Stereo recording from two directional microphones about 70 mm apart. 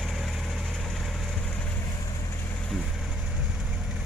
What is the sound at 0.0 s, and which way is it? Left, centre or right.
Vehicle, centre.